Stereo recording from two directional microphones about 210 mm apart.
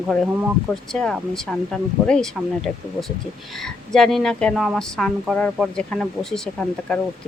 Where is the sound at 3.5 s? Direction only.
Centre (ahead or behind).